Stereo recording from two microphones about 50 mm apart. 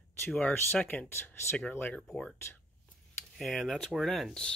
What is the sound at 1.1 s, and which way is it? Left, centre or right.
Speech, left.